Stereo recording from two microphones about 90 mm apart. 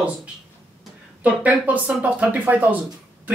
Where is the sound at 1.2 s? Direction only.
15° right (ahead or behind).